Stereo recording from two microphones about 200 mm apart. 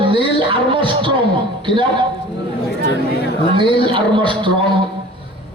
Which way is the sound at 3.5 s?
25° right (ahead or behind).